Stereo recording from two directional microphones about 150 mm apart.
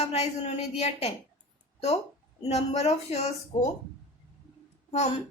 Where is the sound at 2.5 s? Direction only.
45° left (ahead or behind).